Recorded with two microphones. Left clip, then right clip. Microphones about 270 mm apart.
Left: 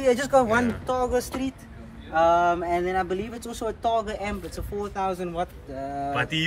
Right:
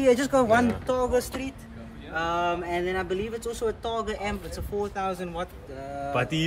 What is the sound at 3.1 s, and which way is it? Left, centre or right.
Speech, left.